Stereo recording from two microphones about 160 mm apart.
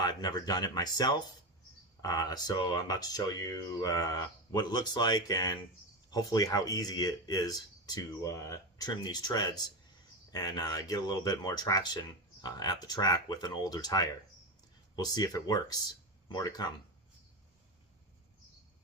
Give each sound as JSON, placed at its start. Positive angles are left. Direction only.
{"t": 0.0, "sound": "speech", "side_deg": 25}